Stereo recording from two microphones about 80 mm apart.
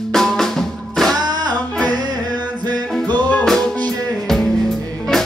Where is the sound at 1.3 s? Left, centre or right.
Right.